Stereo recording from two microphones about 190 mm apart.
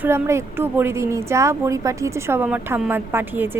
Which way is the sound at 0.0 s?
15° right (ahead or behind).